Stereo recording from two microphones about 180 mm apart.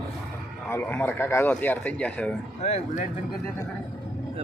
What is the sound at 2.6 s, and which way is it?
Speech, 40° left (ahead or behind).